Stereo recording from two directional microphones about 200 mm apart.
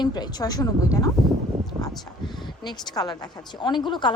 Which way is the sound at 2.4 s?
20° left (ahead or behind).